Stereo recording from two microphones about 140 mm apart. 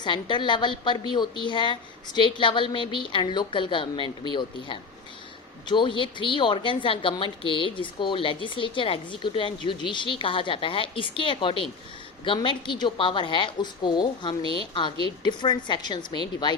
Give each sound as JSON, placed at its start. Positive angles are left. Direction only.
{"t": 0.0, "sound": "a woman's voice", "side_deg": 35}